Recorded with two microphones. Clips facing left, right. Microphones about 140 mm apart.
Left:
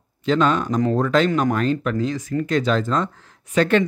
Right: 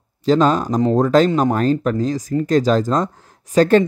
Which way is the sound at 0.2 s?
35° right (ahead or behind).